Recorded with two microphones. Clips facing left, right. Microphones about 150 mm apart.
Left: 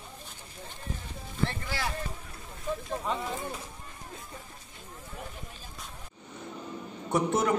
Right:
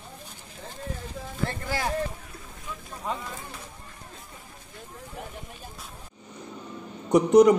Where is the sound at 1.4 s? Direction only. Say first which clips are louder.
Right 3 dB; 45° right (ahead or behind).